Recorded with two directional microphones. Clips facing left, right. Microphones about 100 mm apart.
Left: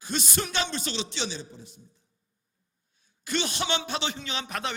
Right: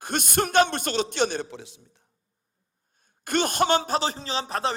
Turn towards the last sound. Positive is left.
turn(degrees=-35)  # may be behind; listen again after turning